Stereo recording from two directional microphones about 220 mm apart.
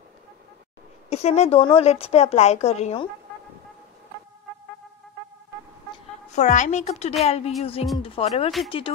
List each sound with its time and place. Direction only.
1.1 s a woman's voice: 30° left (ahead or behind)
6.3 s a woman's voice: 35° left (ahead or behind)